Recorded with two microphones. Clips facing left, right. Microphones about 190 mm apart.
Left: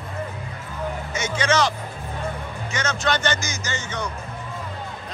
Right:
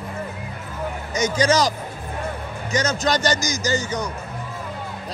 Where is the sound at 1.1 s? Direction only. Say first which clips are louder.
Right 5 dB; 40° right (ahead or behind).